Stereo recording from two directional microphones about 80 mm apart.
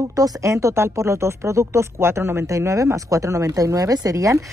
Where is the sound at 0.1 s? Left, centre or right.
Right.